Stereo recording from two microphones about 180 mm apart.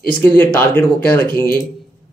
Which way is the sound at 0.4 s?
10° left (ahead or behind).